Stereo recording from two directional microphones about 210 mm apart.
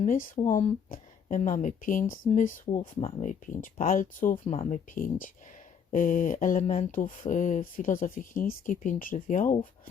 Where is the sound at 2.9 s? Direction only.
30° left (ahead or behind).